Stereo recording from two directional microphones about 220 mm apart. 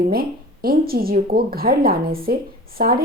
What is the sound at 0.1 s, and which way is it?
Speech, 45° right (ahead or behind).